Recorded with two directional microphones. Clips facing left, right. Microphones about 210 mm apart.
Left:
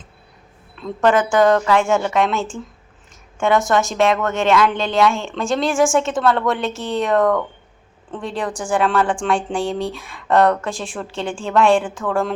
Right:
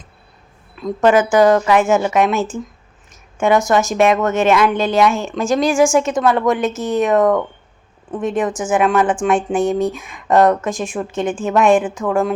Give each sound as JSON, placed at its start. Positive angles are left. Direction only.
{"t": 0.8, "sound": "a woman's voice", "side_deg": -15}
{"t": 3.9, "sound": "a woman's voice", "side_deg": -15}
{"t": 5.5, "sound": "a woman's voice", "side_deg": 0}
{"t": 6.2, "sound": "a woman's voice", "side_deg": -15}